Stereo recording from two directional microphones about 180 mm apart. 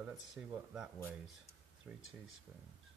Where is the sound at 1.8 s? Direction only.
5° right (ahead or behind).